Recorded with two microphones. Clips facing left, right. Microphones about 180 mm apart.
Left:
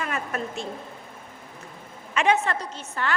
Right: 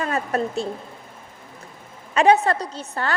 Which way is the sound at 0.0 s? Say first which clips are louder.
Right 6 dB; 35° right (ahead or behind).